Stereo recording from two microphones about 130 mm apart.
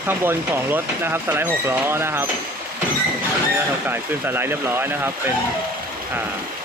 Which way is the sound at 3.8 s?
15° right (ahead or behind).